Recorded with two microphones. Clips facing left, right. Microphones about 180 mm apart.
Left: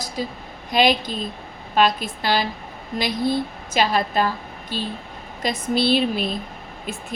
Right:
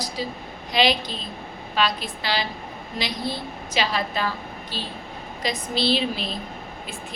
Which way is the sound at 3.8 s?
50° left (ahead or behind).